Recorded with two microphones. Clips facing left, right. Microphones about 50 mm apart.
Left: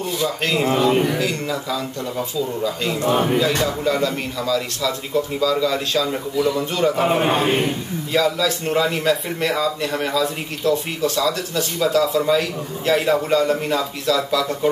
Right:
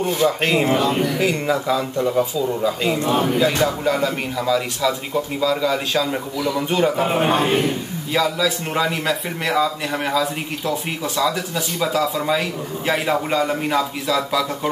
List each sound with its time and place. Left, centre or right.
0.0 s speech: right
0.7 s speech: left
1.2 s speech: right